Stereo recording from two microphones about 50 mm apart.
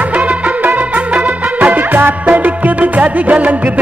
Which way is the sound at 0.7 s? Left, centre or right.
Right.